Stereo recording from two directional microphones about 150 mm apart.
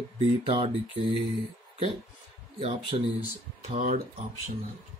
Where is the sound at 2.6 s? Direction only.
40° right (ahead or behind).